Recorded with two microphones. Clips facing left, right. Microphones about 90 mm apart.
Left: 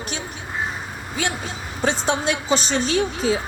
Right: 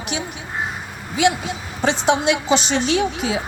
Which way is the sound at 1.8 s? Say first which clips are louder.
Right 4 dB; centre (ahead or behind).